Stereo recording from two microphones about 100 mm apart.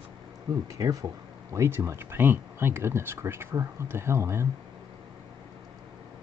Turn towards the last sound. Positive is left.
turn(degrees=-25)  # may be behind; listen again after turning